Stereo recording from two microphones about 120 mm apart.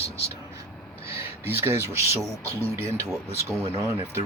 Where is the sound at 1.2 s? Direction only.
20° right (ahead or behind).